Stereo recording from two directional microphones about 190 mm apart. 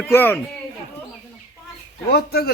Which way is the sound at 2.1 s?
55° left (ahead or behind).